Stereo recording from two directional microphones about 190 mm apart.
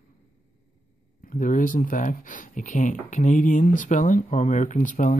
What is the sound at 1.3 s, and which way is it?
Speech, 45° left (ahead or behind).